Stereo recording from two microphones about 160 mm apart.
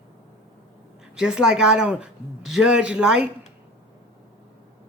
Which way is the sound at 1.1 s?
5° right (ahead or behind).